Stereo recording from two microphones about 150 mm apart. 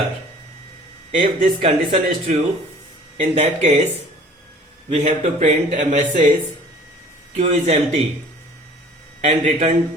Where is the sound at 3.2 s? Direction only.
45° right (ahead or behind).